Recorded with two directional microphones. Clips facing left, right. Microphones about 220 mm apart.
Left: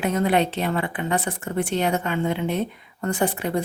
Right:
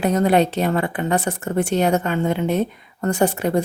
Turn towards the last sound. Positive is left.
turn(degrees=-40)  # may be behind; listen again after turning